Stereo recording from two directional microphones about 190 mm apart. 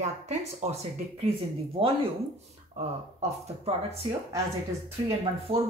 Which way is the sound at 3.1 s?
30° right (ahead or behind).